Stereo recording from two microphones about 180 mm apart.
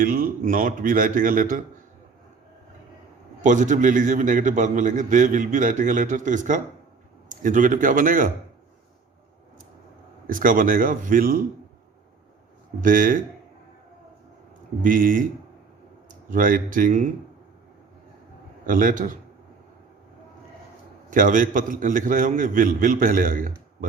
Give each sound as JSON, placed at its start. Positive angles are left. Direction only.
{"t": 0.0, "sound": "a man's voice", "side_deg": -50}
{"t": 3.4, "sound": "a man's voice", "side_deg": -45}
{"t": 10.2, "sound": "a man's voice", "side_deg": -50}
{"t": 12.8, "sound": "a man's voice", "side_deg": -50}
{"t": 14.8, "sound": "a man's voice", "side_deg": -50}
{"t": 18.6, "sound": "a man's voice", "side_deg": -50}
{"t": 21.1, "sound": "a man's voice", "side_deg": -45}